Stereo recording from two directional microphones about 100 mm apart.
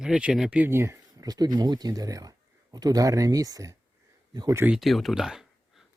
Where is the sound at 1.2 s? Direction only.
40° right (ahead or behind).